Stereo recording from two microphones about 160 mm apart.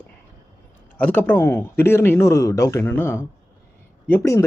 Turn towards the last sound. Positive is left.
turn(degrees=15)  # may be behind; listen again after turning